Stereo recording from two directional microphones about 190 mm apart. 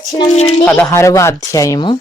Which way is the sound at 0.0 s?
20° left (ahead or behind).